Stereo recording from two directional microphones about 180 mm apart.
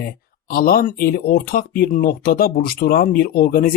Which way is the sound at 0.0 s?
55° left (ahead or behind).